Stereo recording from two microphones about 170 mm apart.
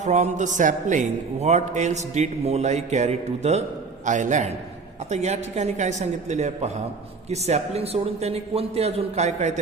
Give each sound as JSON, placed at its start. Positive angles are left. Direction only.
{"t": 0.0, "sound": "a man's voice", "side_deg": -45}